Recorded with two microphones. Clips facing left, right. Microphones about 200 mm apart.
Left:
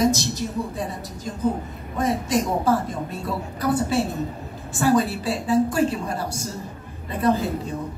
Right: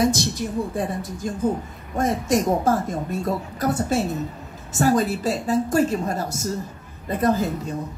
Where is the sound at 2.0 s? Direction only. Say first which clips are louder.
Right 1 dB; 45° right (ahead or behind).